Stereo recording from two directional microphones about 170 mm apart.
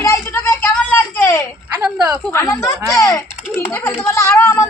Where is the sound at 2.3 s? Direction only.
15° left (ahead or behind).